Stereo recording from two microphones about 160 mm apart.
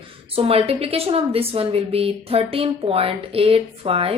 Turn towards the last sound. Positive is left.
turn(degrees=-35)  # may be behind; listen again after turning